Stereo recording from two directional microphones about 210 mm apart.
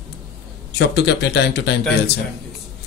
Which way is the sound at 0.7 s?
50° left (ahead or behind).